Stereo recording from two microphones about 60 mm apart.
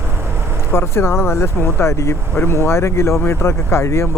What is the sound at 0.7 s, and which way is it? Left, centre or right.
Speech, left.